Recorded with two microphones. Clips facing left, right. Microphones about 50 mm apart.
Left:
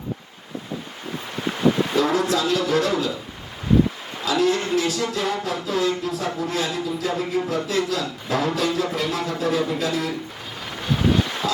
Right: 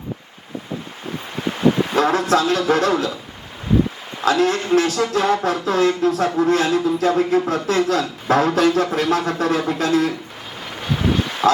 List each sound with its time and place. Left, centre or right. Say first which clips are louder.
2.0 s speech: right 4 dB; right
4.3 s speech: right 4 dB; right
11.4 s speech: right 13 dB; right